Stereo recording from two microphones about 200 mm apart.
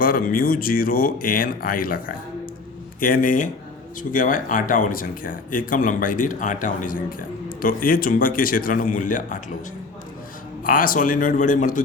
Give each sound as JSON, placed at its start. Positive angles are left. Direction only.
{"t": 0.0, "sound": "speech", "side_deg": 45}
{"t": 10.6, "sound": "speech", "side_deg": 45}